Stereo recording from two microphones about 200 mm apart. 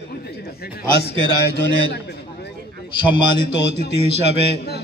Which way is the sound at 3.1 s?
25° left (ahead or behind).